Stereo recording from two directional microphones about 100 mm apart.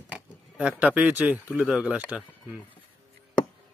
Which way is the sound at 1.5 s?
10° right (ahead or behind).